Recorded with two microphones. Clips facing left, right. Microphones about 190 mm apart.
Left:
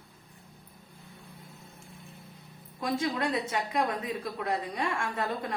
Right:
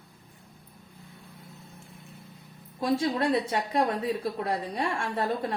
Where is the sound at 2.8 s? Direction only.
30° right (ahead or behind).